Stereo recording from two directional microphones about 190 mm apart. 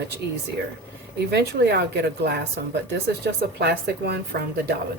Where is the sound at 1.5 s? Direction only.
60° right (ahead or behind).